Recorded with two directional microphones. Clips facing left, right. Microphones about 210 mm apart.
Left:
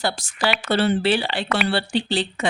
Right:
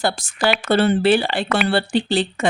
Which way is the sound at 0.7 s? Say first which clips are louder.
Right 4 dB; 50° right (ahead or behind).